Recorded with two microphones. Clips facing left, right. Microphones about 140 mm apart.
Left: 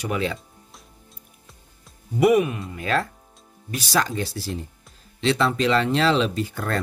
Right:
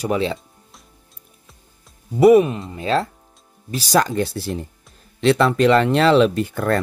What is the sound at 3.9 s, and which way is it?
Speech, 50° right (ahead or behind).